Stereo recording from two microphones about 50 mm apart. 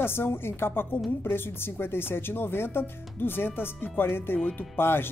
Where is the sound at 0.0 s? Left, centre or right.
Left.